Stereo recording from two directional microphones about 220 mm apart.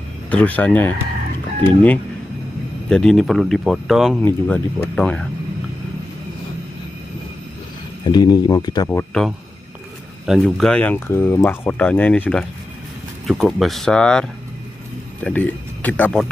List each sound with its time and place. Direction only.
0.3 s speech: 5° left (ahead or behind)
2.9 s speech: centre (ahead or behind)
8.0 s speech: 20° left (ahead or behind)